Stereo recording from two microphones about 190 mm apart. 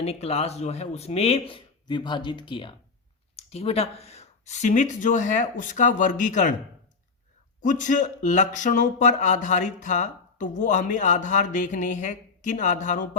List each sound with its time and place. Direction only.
0.0 s speech: 35° left (ahead or behind)
7.6 s speech: 40° left (ahead or behind)